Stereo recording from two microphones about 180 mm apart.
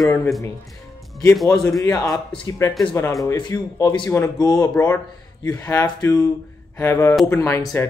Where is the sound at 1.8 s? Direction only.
20° left (ahead or behind).